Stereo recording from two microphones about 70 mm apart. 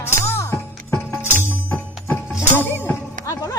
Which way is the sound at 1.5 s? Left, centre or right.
Left.